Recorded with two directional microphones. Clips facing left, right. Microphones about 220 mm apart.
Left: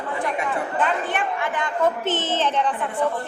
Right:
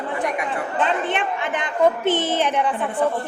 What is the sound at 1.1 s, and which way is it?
A woman's voice, 20° right (ahead or behind).